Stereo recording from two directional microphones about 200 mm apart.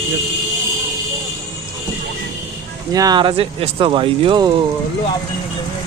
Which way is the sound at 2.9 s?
20° right (ahead or behind).